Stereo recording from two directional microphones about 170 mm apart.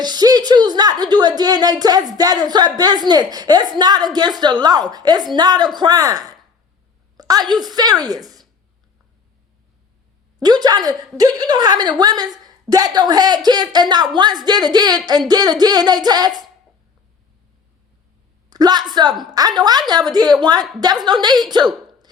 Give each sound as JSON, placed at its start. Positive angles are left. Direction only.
{"t": 0.0, "sound": "a woman's voice", "side_deg": -25}
{"t": 10.4, "sound": "a woman's voice", "side_deg": -25}
{"t": 18.5, "sound": "a woman's voice", "side_deg": -25}